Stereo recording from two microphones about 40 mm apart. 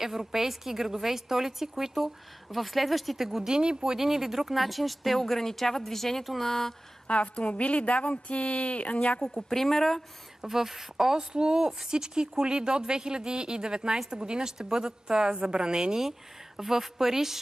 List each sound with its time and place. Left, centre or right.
0.0 s speech: centre
3.4 s speech: centre
7.1 s a woman's voice: left
9.2 s speech: centre
10.4 s speech: centre
11.1 s speech: centre
16.0 s speech: centre